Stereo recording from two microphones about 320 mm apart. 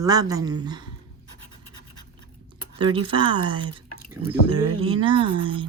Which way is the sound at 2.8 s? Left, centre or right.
Centre.